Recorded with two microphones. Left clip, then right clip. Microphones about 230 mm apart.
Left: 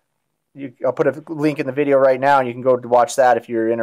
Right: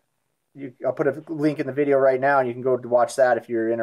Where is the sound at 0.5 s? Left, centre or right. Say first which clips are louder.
Left 5 dB; left.